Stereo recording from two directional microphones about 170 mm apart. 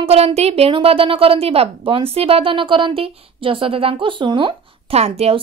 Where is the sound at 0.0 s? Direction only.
35° right (ahead or behind).